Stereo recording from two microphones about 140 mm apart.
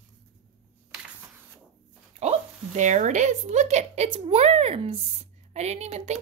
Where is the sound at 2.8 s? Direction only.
60° right (ahead or behind).